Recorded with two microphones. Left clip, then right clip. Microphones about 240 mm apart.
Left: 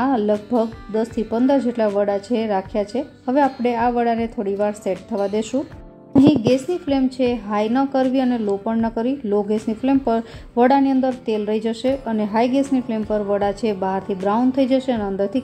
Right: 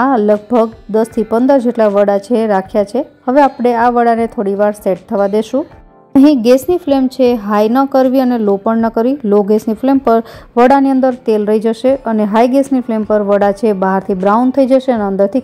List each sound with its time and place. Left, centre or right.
0.0 s a woman's voice: right